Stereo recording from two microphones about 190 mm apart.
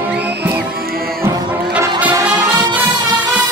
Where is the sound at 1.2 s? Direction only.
10° right (ahead or behind).